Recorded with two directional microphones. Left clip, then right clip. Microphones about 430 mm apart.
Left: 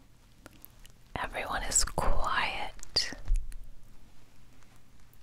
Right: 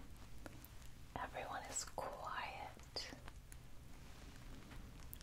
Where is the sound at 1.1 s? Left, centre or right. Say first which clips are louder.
Left 12 dB; left.